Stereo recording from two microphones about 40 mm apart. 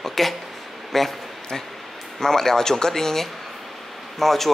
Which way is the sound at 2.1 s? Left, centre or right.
Centre.